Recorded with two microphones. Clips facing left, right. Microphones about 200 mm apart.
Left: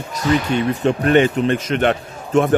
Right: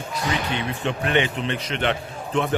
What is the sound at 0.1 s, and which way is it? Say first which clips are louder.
Speech: left 9 dB; 40° left (ahead or behind).